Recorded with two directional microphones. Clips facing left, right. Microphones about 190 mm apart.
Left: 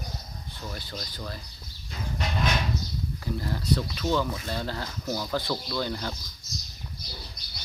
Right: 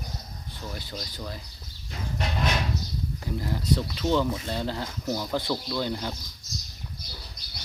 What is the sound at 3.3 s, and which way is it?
Speech, 15° right (ahead or behind).